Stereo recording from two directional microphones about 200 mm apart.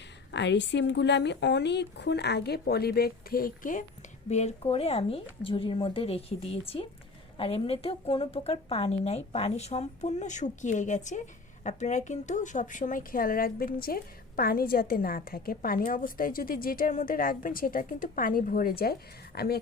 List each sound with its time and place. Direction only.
0.3 s a woman's voice: 60° left (ahead or behind)